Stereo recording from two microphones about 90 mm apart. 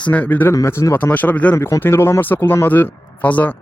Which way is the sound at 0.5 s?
35° left (ahead or behind).